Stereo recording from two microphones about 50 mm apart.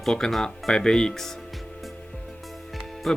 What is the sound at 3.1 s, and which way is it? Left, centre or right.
Music, centre.